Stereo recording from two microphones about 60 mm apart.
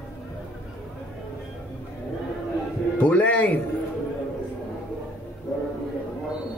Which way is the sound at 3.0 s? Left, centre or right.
Left.